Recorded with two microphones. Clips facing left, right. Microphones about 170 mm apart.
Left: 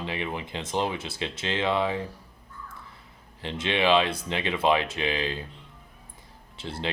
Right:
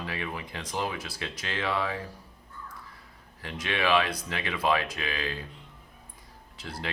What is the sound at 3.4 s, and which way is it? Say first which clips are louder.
Speech: left 4 dB; 25° left (ahead or behind).